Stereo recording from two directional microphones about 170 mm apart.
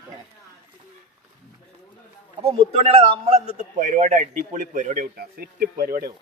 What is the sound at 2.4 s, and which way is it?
A man's voice, 35° right (ahead or behind).